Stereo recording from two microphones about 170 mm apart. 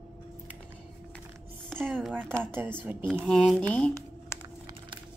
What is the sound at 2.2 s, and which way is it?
Speech, 10° right (ahead or behind).